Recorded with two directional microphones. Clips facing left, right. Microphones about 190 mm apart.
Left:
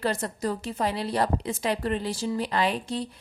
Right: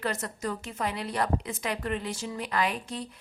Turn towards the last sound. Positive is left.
turn(degrees=30)  # may be behind; listen again after turning